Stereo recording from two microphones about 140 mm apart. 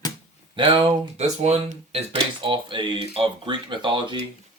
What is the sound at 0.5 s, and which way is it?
Speech, 35° right (ahead or behind).